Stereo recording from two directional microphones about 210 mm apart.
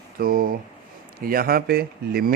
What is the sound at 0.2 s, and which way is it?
Speech, 45° right (ahead or behind).